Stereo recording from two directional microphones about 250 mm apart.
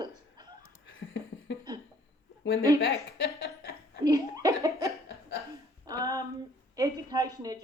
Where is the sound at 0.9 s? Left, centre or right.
Left.